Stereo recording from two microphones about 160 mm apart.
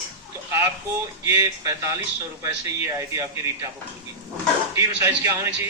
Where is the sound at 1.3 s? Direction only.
15° right (ahead or behind).